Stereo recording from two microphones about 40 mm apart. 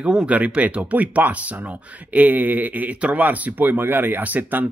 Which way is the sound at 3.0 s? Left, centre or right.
Right.